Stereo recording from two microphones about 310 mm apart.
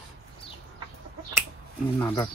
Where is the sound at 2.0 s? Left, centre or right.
Centre.